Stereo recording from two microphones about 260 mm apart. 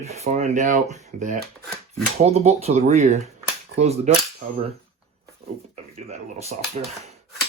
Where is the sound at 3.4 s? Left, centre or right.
Right.